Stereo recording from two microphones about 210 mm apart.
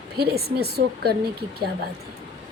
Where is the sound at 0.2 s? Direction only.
50° right (ahead or behind).